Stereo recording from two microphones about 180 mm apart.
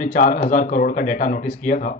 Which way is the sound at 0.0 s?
50° left (ahead or behind).